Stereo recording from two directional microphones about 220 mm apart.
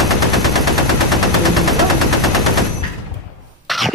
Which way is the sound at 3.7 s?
Centre (ahead or behind).